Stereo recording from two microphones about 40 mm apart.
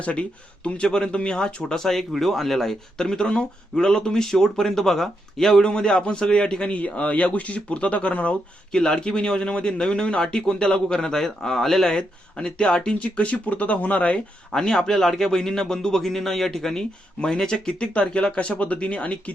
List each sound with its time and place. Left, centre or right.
0.0 s a man's voice: left
1.8 s speech: centre
3.0 s speech: centre
5.6 s a man's voice: left
8.7 s a man's voice: centre
14.5 s a man's voice: centre